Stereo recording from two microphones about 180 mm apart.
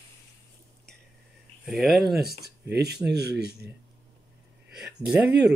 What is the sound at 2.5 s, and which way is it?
Speech, 65° right (ahead or behind).